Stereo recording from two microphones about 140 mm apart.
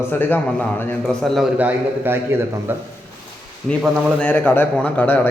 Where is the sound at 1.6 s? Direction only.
15° right (ahead or behind).